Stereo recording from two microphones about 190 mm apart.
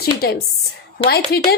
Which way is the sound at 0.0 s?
55° left (ahead or behind).